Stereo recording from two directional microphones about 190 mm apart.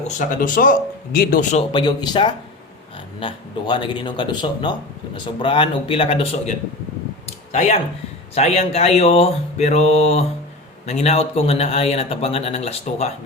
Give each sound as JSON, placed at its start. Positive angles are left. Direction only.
{"t": 0.1, "sound": "a man's voice", "side_deg": 45}
{"t": 1.7, "sound": "speech", "side_deg": 20}
{"t": 8.4, "sound": "speech", "side_deg": 35}